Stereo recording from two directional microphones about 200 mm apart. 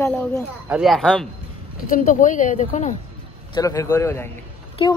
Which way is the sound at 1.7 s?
45° left (ahead or behind).